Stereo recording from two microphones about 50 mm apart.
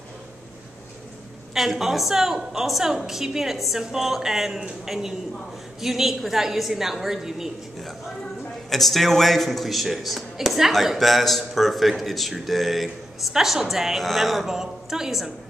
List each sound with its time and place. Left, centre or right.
1.5 s a man's voice: centre
8.6 s a man's voice: centre